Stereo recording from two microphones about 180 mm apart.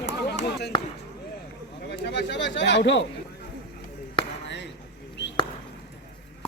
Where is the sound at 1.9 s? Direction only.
70° left (ahead or behind).